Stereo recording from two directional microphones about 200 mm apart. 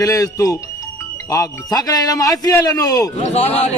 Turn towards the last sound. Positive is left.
turn(degrees=30)  # may be behind; listen again after turning